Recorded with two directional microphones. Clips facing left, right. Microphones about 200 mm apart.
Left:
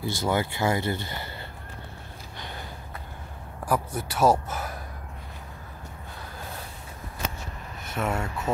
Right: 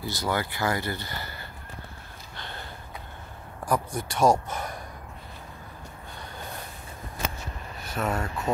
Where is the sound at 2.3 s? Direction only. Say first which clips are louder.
Left 1 dB; 15° left (ahead or behind).